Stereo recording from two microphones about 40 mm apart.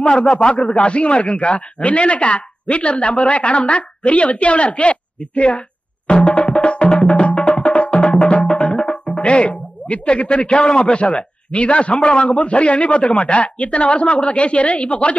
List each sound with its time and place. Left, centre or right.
0.0 s speech: left
0.6 s a man's voice: left
6.0 s music: left
11.1 s a man's voice: left